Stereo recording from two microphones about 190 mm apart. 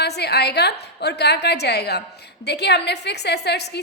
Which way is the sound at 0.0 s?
60° left (ahead or behind).